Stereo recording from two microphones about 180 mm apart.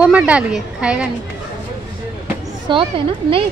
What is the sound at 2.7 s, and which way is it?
Speech, 30° right (ahead or behind).